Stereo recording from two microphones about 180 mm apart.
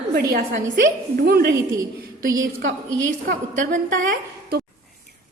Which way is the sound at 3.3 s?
45° right (ahead or behind).